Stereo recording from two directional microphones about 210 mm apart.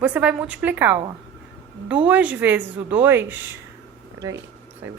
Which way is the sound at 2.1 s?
5° right (ahead or behind).